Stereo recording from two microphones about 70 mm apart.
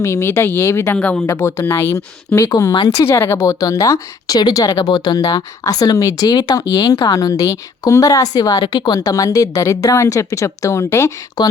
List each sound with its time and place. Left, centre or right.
0.0 s speech: left
0.9 s speech: centre
1.3 s speech: left
2.5 s speech: left
3.0 s speech: left
3.3 s speech: left
4.7 s speech: left
11.4 s speech: left